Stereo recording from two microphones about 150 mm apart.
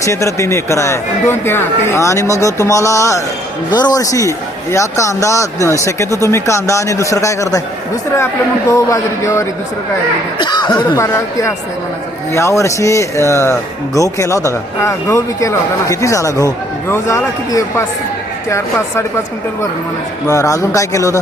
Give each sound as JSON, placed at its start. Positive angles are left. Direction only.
{"t": 0.0, "sound": "speech", "side_deg": 20}
{"t": 8.7, "sound": "speech", "side_deg": 20}
{"t": 10.3, "sound": "speech", "side_deg": 30}
{"t": 11.0, "sound": "a woman's voice", "side_deg": 15}
{"t": 20.3, "sound": "speech", "side_deg": 20}